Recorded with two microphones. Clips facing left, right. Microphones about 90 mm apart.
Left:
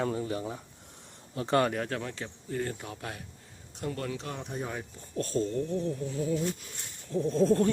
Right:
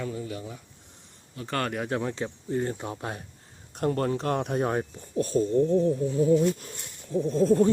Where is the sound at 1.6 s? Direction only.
Centre (ahead or behind).